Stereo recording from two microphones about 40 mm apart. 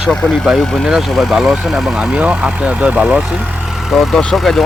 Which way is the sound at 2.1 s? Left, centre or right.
Right.